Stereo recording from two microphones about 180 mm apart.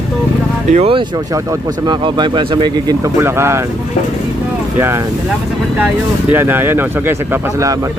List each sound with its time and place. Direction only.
0.7 s speech: 35° right (ahead or behind)
3.2 s speech: 15° right (ahead or behind)
6.3 s speech: 10° right (ahead or behind)